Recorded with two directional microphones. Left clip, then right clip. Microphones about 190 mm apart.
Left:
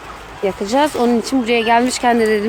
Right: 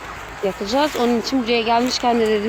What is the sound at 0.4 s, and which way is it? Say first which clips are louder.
Speech: left 4 dB; 25° left (ahead or behind).